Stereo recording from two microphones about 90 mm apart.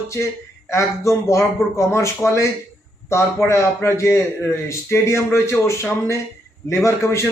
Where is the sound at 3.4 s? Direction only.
30° left (ahead or behind).